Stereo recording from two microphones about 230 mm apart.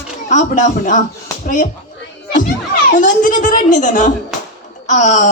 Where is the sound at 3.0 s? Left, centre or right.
Left.